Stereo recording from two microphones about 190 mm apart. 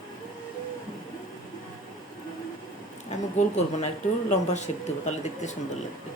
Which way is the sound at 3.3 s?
35° left (ahead or behind).